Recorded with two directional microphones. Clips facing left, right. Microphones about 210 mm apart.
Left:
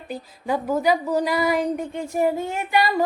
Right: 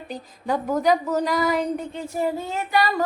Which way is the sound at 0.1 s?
10° left (ahead or behind).